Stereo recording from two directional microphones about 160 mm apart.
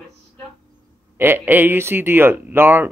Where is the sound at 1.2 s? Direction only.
15° right (ahead or behind).